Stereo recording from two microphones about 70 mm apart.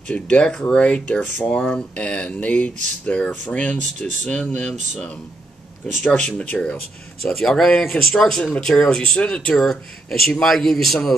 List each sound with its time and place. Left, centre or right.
0.1 s speech: centre
6.0 s speech: centre
7.2 s speech: centre